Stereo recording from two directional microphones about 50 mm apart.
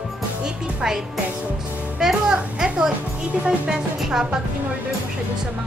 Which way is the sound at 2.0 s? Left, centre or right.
Centre.